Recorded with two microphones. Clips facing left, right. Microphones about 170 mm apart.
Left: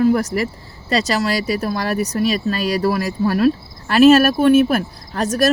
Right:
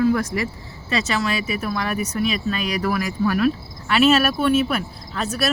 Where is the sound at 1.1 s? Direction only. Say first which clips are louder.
Left 4 dB; 35° left (ahead or behind).